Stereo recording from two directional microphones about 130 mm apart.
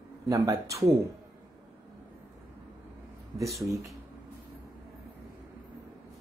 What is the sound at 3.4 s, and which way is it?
Speech, 25° right (ahead or behind).